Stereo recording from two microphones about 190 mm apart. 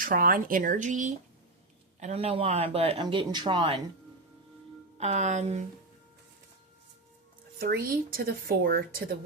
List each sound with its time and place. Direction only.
0.0 s speech: 50° right (ahead or behind); by 3.8 s 25° right (ahead or behind)
4.9 s speech: 35° right (ahead or behind)
7.6 s speech: 50° right (ahead or behind)